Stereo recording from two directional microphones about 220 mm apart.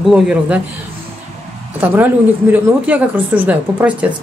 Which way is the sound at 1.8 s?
10° right (ahead or behind).